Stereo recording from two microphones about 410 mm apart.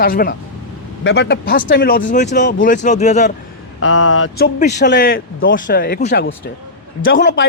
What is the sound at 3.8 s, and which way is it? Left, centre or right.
Speech, left.